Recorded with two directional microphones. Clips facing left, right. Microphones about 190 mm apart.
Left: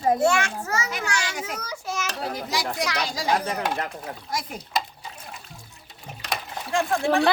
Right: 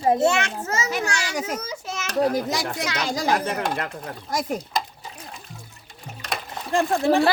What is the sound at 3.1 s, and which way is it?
Speech, 60° right (ahead or behind).